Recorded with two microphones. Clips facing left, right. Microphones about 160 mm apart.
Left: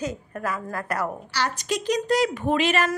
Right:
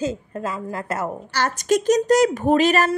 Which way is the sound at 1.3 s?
50° right (ahead or behind).